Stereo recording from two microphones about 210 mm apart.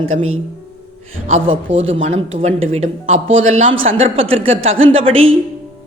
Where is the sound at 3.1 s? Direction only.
70° right (ahead or behind).